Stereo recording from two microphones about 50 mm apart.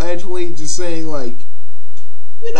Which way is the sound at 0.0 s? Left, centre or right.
Centre.